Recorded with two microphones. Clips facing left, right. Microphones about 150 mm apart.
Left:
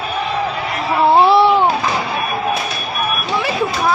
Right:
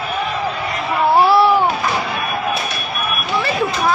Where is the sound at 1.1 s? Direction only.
25° left (ahead or behind).